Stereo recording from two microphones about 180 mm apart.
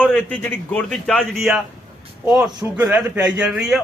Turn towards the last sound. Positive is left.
turn(degrees=-5)  # may be behind; listen again after turning